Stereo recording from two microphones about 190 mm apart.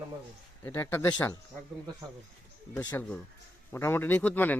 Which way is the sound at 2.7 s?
10° left (ahead or behind).